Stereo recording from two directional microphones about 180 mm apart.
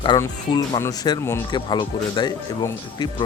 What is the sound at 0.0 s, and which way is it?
Speech, 25° left (ahead or behind).